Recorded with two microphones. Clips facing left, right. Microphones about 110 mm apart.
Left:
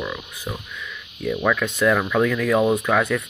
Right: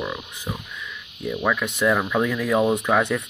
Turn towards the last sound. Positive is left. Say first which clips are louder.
# left 1 dB
turn(degrees=-20)  # may be behind; listen again after turning